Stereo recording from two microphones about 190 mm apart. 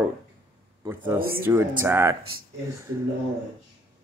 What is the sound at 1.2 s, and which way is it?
Speech, 50° right (ahead or behind).